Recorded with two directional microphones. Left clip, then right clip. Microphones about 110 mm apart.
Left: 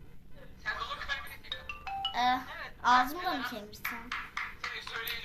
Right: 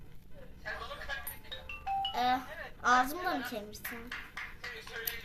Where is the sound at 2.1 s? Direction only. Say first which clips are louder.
Left 3 dB; 50° right (ahead or behind).